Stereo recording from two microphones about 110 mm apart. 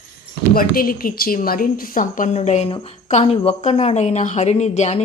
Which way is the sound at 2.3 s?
90° left.